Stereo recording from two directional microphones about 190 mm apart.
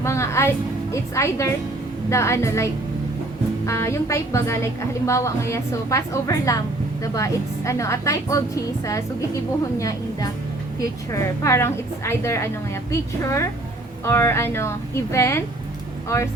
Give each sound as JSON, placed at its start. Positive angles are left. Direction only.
{"t": 0.0, "sound": "music", "side_deg": 15}
{"t": 0.9, "sound": "a woman's voice", "side_deg": 15}
{"t": 3.7, "sound": "a woman's voice", "side_deg": 15}